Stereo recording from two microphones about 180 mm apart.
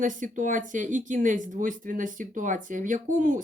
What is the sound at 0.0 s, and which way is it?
Speech, 45° right (ahead or behind).